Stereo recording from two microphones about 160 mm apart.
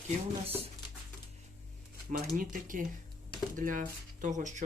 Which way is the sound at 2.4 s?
55° right (ahead or behind).